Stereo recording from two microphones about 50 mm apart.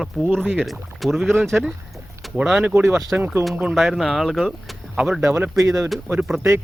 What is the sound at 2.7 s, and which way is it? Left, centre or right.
Speech, right.